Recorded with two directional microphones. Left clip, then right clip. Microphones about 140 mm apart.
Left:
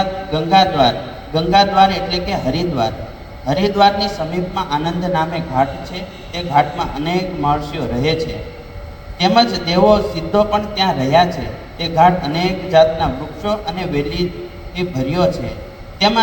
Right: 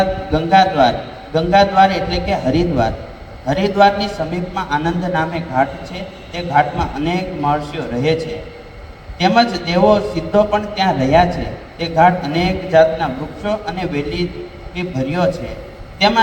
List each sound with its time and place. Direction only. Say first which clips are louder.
0.0 s a man's voice: right 2 dB; 40° left (ahead or behind)